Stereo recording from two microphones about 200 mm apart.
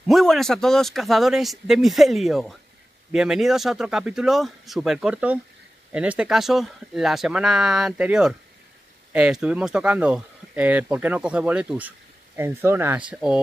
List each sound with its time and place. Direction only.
0.0 s speech: centre (ahead or behind)